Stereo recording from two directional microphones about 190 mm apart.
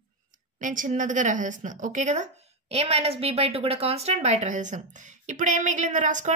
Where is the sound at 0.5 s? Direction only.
45° right (ahead or behind).